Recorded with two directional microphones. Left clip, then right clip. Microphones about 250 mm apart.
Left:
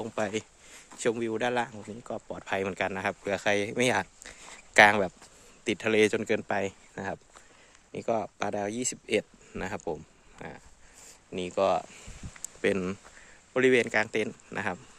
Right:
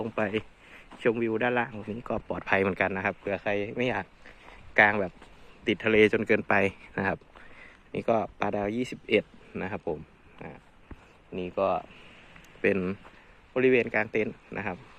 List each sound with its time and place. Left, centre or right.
0.0 s speech: centre
2.0 s speech: centre; by 5.1 s left
5.6 s speech: centre; by 11.9 s left
12.4 s a sound: centre
13.5 s speech: left